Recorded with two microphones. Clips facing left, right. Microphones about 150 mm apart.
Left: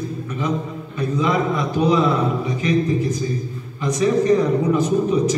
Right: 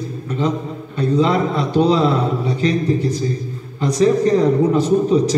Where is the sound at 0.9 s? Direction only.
30° right (ahead or behind).